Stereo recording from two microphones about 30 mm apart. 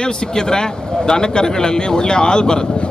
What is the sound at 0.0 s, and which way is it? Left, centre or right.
Speech, left.